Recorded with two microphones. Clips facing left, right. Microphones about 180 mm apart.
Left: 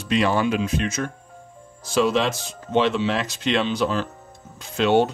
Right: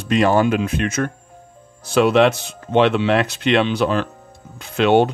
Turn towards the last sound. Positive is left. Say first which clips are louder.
# right 4 dB
turn(degrees=-65)  # may be behind; listen again after turning